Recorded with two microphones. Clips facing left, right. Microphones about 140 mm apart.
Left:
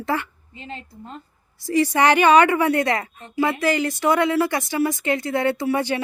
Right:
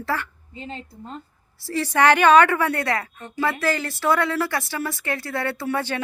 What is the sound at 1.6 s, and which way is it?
A woman's voice, 15° left (ahead or behind).